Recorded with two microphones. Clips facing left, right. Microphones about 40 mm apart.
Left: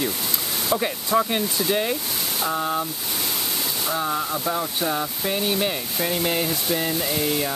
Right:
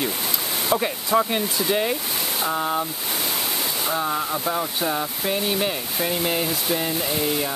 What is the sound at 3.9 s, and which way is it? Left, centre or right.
Speech, centre.